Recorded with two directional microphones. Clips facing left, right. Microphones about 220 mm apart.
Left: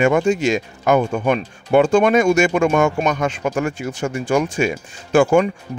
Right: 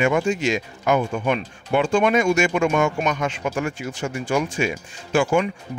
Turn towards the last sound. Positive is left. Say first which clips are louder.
# left 5 dB
turn(degrees=45)  # may be behind; listen again after turning